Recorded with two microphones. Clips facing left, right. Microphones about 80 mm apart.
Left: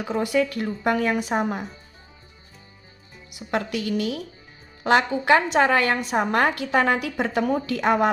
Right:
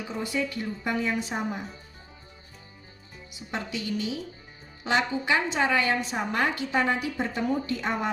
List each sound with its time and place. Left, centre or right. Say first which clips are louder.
0.0 s a woman's voice: left 8 dB; left
3.2 s a woman's voice: left 8 dB; left